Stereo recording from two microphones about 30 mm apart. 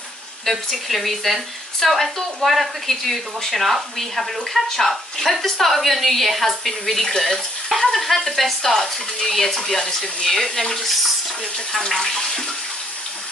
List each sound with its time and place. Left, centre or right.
0.5 s a woman's voice: centre